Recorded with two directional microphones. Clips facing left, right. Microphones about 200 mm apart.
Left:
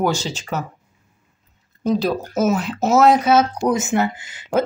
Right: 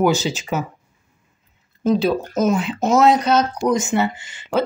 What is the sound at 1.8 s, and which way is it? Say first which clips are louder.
Speech: right 2 dB; centre (ahead or behind).